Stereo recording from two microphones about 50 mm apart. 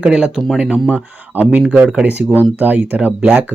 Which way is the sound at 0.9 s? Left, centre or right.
Right.